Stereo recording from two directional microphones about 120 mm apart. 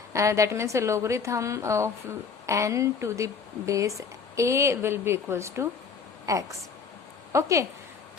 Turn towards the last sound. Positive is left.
turn(degrees=-25)  # may be behind; listen again after turning